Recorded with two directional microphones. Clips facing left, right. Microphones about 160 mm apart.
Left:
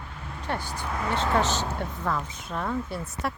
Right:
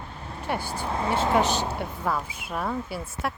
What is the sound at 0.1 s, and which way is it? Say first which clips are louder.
Vehicle: right 2 dB; 30° right (ahead or behind).